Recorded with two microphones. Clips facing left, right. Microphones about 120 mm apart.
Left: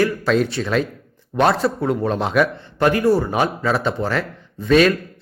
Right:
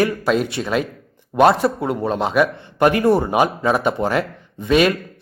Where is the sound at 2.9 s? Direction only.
25° right (ahead or behind).